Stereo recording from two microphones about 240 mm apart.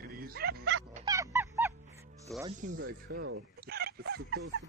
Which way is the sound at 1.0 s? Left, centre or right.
Centre.